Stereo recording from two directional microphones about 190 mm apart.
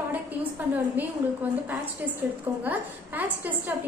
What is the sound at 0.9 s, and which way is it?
A woman's voice, 10° right (ahead or behind).